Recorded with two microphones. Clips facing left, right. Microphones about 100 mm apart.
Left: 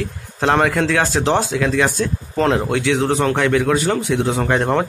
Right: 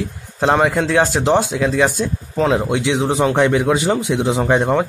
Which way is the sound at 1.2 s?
5° right (ahead or behind).